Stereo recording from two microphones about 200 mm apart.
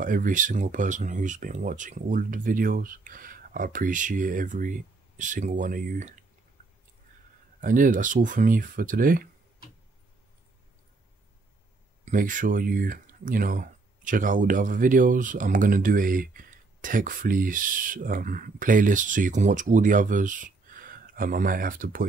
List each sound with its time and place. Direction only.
0.0 s speech: 40° right (ahead or behind)
7.6 s speech: 40° right (ahead or behind)
12.0 s speech: 40° right (ahead or behind)